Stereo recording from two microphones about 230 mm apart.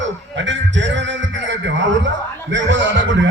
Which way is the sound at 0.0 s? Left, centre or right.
Right.